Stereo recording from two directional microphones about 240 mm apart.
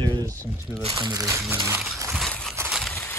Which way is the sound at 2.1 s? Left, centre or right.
Centre.